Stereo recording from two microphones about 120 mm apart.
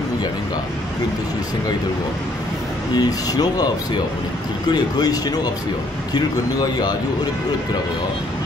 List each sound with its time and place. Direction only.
2.9 s speech: 35° left (ahead or behind)